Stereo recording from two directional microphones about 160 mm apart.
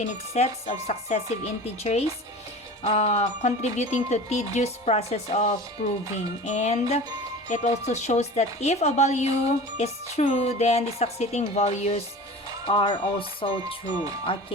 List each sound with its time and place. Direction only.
0.0 s a woman's voice: 40° left (ahead or behind)